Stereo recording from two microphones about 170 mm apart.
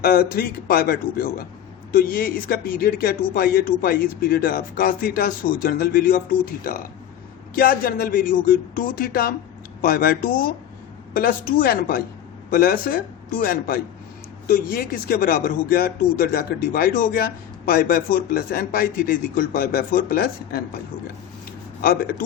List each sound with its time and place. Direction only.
0.0 s a man's voice: 60° left (ahead or behind)
21.8 s speech: 60° left (ahead or behind)